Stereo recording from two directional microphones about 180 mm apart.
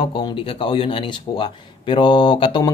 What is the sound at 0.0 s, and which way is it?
Speech, 25° left (ahead or behind).